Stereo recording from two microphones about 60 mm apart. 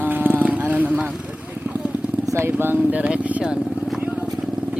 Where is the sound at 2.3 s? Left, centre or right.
Right.